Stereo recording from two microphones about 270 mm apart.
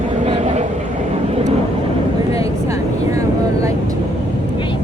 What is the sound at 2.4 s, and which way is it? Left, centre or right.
Vehicle, centre.